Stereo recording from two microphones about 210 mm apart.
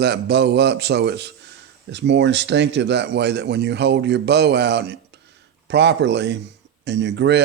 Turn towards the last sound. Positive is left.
turn(degrees=-55)  # may be behind; listen again after turning